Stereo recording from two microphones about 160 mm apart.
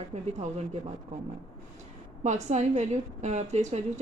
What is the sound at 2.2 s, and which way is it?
A woman's voice, 45° right (ahead or behind).